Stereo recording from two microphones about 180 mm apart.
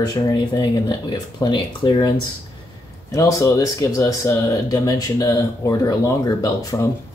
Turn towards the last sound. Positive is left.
turn(degrees=20)  # may be behind; listen again after turning